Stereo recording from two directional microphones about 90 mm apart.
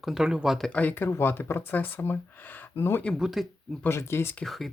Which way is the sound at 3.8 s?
30° left (ahead or behind).